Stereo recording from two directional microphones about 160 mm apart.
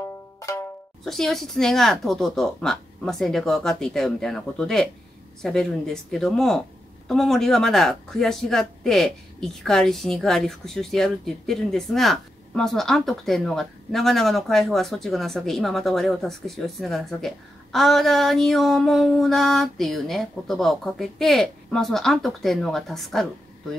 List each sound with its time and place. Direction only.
0.0 s music: 20° left (ahead or behind)
1.0 s speech: centre (ahead or behind)